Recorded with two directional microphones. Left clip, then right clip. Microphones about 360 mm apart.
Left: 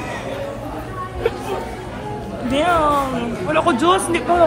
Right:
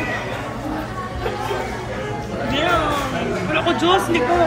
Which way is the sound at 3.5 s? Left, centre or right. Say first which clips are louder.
Left 2 dB; centre.